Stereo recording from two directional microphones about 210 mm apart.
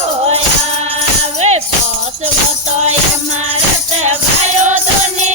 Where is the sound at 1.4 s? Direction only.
30° right (ahead or behind).